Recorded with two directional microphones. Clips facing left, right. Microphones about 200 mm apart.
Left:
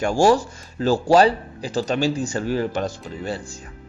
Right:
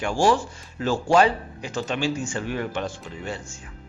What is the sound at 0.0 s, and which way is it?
A man's voice, 40° left (ahead or behind).